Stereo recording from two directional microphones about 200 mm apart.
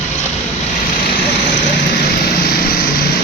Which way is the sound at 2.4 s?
50° left (ahead or behind).